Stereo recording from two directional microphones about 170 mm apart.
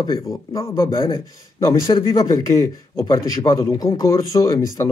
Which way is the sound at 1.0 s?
25° left (ahead or behind).